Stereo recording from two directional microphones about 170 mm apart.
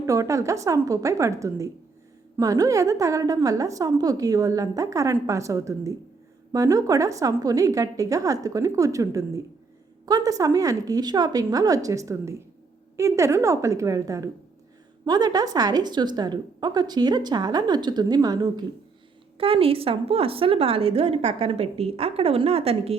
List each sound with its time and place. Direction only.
0.0 s a woman's voice: 20° right (ahead or behind)
19.4 s a woman's voice: 35° right (ahead or behind)